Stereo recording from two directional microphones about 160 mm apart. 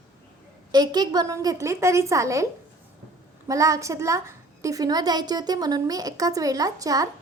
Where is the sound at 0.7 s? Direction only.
25° right (ahead or behind).